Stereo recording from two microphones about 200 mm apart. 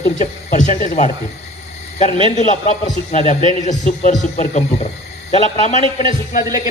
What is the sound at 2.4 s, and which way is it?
A man's voice, 35° left (ahead or behind).